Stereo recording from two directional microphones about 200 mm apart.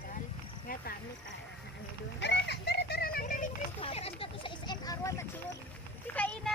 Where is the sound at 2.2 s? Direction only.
60° left (ahead or behind); by 3.5 s 45° left (ahead or behind).